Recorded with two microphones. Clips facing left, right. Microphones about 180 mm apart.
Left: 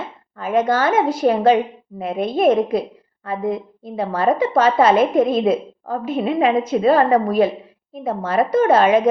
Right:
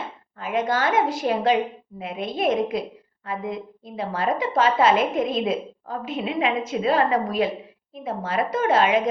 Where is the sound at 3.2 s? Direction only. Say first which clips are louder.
Left 7 dB; 35° left (ahead or behind).